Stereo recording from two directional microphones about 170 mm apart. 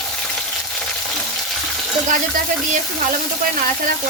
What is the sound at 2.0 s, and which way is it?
Speech, 50° right (ahead or behind).